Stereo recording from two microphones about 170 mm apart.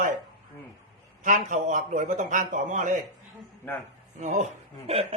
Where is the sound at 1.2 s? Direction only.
50° right (ahead or behind).